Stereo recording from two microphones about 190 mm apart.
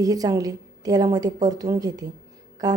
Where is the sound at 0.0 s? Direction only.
20° right (ahead or behind).